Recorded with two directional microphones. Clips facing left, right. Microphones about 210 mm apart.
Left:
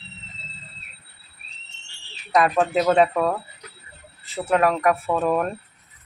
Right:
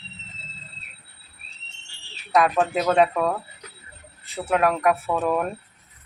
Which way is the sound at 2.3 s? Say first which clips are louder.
Left 1 dB; centre (ahead or behind).